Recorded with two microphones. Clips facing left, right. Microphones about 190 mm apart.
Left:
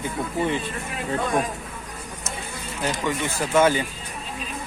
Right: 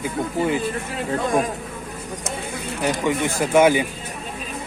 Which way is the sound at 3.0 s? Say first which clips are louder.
Right 4 dB; 15° right (ahead or behind).